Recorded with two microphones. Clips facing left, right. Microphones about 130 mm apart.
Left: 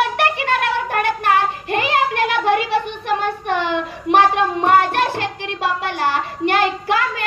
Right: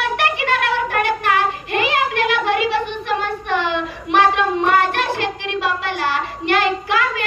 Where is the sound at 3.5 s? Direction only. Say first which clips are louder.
Even; 45° left (ahead or behind).